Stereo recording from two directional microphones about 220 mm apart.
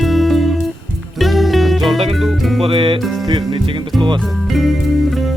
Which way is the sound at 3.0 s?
Centre (ahead or behind).